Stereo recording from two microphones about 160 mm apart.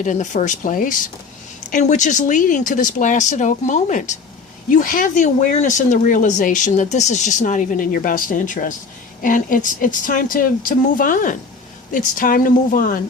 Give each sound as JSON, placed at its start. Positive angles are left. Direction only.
{"t": 0.0, "sound": "speech", "side_deg": 50}